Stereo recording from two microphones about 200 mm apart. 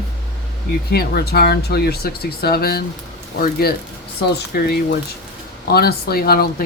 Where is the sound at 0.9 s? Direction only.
50° left (ahead or behind).